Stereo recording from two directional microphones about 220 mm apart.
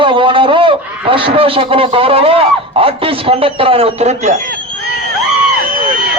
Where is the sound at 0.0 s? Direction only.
20° right (ahead or behind).